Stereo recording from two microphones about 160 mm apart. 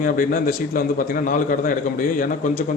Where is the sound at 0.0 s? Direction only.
60° left (ahead or behind).